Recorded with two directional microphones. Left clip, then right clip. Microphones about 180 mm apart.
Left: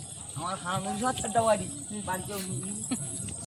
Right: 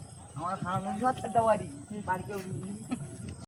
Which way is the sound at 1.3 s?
20° left (ahead or behind).